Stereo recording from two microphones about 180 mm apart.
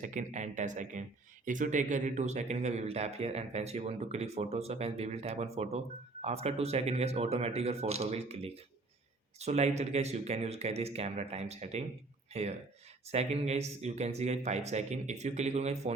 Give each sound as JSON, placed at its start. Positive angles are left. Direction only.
{"t": 0.0, "sound": "speech", "side_deg": -45}